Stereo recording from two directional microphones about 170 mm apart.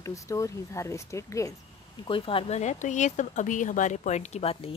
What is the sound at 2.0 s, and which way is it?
Speech, 30° left (ahead or behind).